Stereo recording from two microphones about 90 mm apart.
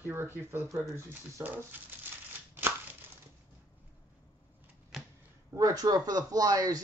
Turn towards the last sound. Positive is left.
turn(degrees=-45)  # may be behind; listen again after turning